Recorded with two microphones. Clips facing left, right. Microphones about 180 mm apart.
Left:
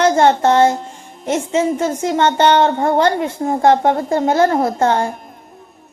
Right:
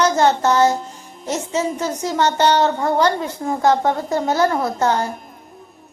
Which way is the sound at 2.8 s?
25° left (ahead or behind).